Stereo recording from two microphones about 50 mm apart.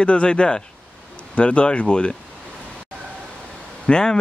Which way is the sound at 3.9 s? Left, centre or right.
Centre.